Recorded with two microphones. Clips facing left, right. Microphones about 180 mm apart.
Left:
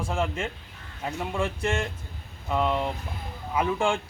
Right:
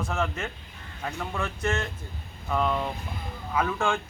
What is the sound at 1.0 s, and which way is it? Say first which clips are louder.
Speech: left 3 dB; 15° left (ahead or behind).